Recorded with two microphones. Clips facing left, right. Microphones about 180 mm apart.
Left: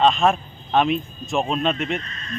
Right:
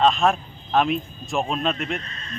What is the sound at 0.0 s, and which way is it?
Speech, centre (ahead or behind).